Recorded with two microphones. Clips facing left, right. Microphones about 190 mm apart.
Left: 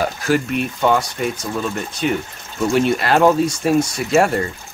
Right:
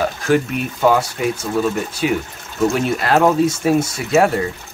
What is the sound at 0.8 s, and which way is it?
Speech, 5° right (ahead or behind).